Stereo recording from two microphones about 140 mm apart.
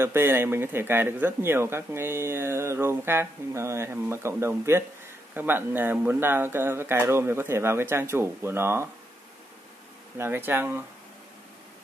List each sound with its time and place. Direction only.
0.0 s speech: 15° right (ahead or behind)
10.1 s speech: 15° right (ahead or behind)